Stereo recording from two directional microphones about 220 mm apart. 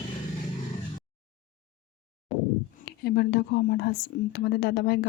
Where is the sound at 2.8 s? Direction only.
45° left (ahead or behind).